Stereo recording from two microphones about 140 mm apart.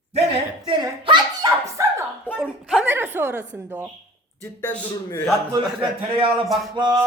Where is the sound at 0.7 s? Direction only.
30° right (ahead or behind).